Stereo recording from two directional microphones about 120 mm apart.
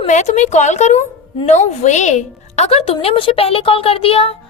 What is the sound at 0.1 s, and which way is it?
A woman's voice, 75° left (ahead or behind).